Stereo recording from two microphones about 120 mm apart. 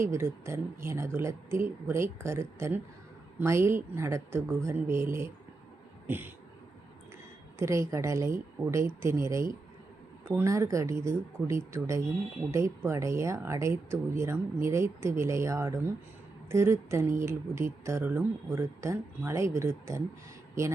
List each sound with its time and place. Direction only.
0.0 s speech: 20° right (ahead or behind)
6.1 s a sound: 15° right (ahead or behind)
7.6 s speech: 25° right (ahead or behind)